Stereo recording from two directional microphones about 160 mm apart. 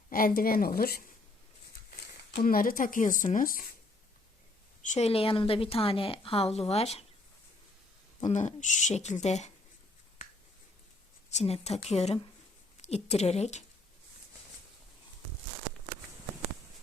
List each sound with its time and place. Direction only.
0.1 s a woman's voice: 65° left (ahead or behind)
2.3 s speech: 65° left (ahead or behind)
4.9 s a woman's voice: 40° left (ahead or behind)
8.3 s speech: 50° left (ahead or behind)
11.3 s a woman's voice: 40° left (ahead or behind)